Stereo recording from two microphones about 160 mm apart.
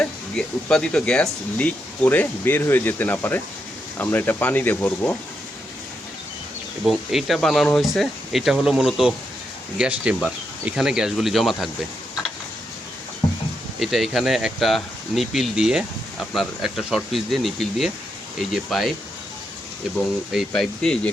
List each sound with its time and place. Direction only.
0.0 s speech: 5° left (ahead or behind)
6.8 s speech: centre (ahead or behind)
13.7 s speech: centre (ahead or behind)
20.3 s speech: 5° left (ahead or behind)